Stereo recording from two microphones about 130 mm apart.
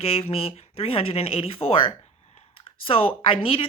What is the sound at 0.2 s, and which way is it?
A woman's voice, 50° left (ahead or behind).